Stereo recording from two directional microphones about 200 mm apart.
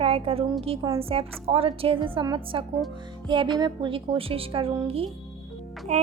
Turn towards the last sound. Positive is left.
turn(degrees=-35)  # may be behind; listen again after turning